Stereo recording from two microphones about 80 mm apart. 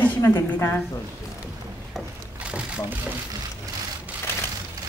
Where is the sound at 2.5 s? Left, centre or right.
Centre.